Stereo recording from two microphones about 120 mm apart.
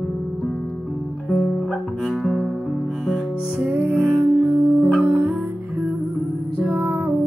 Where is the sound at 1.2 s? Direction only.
5° left (ahead or behind).